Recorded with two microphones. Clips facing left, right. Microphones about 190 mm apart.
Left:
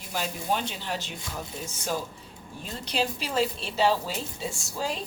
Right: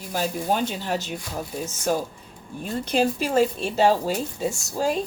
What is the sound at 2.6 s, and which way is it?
Speech, 50° right (ahead or behind).